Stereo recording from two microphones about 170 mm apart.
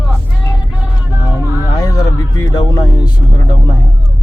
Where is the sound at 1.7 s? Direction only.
20° left (ahead or behind).